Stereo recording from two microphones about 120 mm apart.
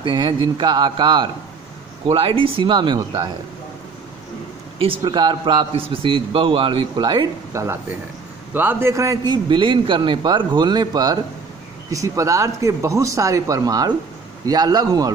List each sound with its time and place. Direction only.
0.0 s a man's voice: 40° right (ahead or behind)
4.7 s a man's voice: 50° right (ahead or behind)
7.5 s a man's voice: 25° right (ahead or behind)